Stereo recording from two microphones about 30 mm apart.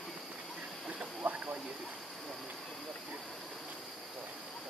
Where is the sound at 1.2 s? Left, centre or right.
Right.